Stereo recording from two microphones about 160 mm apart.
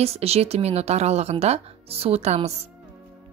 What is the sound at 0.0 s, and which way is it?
A woman's voice, 40° right (ahead or behind).